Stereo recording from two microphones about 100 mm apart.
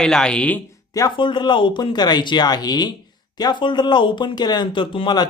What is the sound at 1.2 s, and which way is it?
Speech, 50° left (ahead or behind).